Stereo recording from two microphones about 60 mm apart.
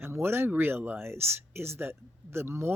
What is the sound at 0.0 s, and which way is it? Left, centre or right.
Speech, right.